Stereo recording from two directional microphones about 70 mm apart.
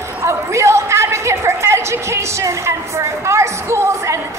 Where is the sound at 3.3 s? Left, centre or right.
Right.